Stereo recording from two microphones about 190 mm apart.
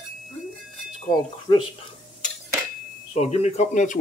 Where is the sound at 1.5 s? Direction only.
25° left (ahead or behind).